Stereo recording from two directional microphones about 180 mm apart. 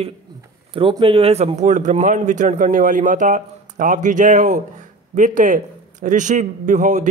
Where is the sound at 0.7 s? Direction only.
30° right (ahead or behind).